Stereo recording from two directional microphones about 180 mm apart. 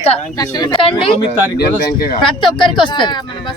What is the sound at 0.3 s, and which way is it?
Speech, 20° left (ahead or behind).